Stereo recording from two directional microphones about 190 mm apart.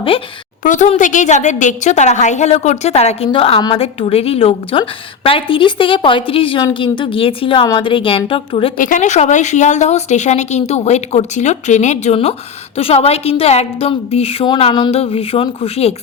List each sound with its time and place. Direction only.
0.6 s a woman's voice: 40° left (ahead or behind)
8.8 s a woman's voice: 40° left (ahead or behind)